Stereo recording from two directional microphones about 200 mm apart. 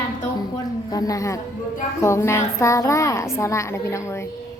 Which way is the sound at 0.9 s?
20° left (ahead or behind).